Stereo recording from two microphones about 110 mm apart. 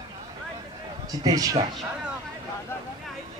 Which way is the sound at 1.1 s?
35° right (ahead or behind).